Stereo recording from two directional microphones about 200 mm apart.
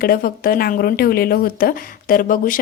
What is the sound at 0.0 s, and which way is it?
Speech, 45° left (ahead or behind).